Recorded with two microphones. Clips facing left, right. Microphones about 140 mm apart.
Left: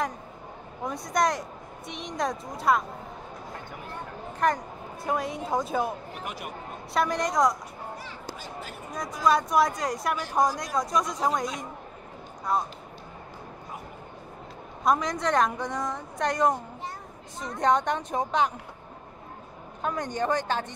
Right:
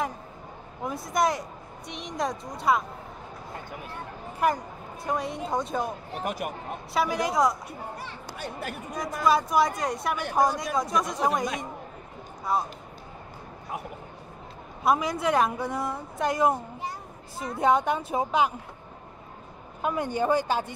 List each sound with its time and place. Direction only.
0.8 s speech: 5° right (ahead or behind)
4.4 s speech: 5° right (ahead or behind)
6.1 s speech: 45° right (ahead or behind)
6.9 s speech: 5° right (ahead or behind)
8.0 s speech: 65° right (ahead or behind)
9.2 s speech: centre (ahead or behind)
12.5 s speech: centre (ahead or behind)
14.8 s speech: 5° right (ahead or behind)
19.8 s speech: 10° right (ahead or behind)